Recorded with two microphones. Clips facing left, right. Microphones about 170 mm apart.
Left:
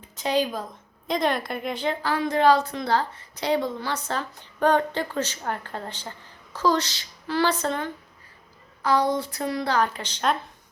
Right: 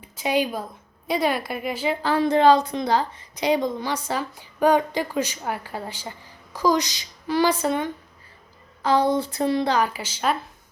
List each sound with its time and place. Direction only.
0.2 s a woman's voice: 10° right (ahead or behind)
2.0 s a woman's voice: 25° right (ahead or behind)
8.8 s speech: 25° right (ahead or behind)
9.7 s a woman's voice: 10° right (ahead or behind)